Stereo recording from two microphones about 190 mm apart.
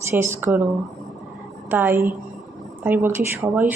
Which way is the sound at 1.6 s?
10° right (ahead or behind).